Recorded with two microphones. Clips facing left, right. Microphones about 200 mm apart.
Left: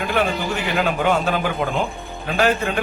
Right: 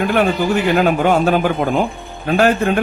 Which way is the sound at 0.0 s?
55° right (ahead or behind).